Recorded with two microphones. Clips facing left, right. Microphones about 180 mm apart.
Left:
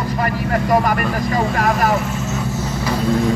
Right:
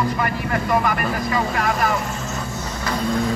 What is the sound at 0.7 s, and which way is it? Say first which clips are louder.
Vehicle: left 3 dB; 40° left (ahead or behind).